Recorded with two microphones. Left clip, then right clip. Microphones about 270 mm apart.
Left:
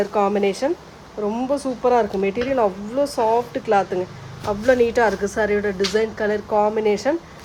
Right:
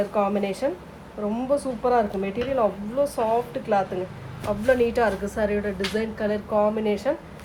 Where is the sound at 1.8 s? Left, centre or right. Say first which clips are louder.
Left 7 dB; left.